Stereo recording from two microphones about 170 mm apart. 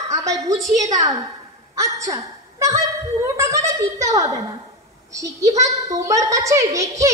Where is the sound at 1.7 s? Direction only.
20° right (ahead or behind).